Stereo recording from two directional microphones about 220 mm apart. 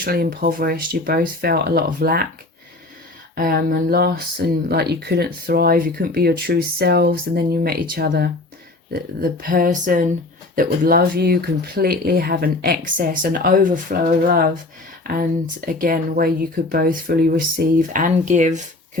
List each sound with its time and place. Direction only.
0.0 s speech: 40° right (ahead or behind)
3.3 s speech: 40° right (ahead or behind)